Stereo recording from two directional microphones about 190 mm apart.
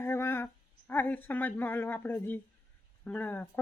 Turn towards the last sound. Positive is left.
turn(degrees=10)  # may be behind; listen again after turning